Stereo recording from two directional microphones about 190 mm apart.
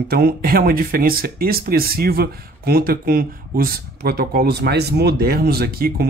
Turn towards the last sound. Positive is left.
turn(degrees=-55)  # may be behind; listen again after turning